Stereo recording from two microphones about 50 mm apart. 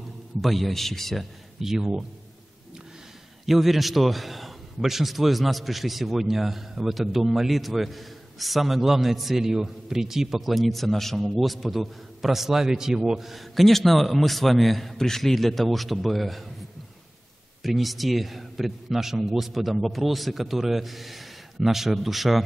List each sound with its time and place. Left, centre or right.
0.4 s a man's voice: centre
1.6 s a man's voice: centre
3.4 s a man's voice: centre
17.6 s a man's voice: centre